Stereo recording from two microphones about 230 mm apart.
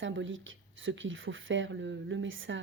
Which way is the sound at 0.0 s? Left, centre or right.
Right.